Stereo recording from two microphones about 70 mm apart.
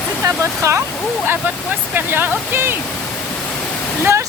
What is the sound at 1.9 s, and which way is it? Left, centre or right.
Speech, right.